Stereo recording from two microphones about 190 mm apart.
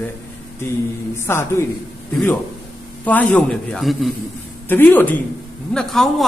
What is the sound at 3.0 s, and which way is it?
Speech, 5° left (ahead or behind).